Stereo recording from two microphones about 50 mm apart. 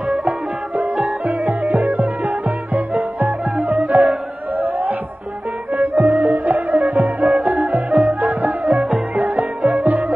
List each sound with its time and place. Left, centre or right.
1.2 s music: right